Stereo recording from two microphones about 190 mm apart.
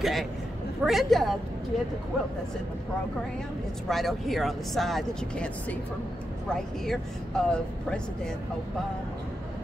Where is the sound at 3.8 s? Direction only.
Centre (ahead or behind).